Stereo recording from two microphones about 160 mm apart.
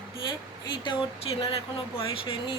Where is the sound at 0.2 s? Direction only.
30° left (ahead or behind).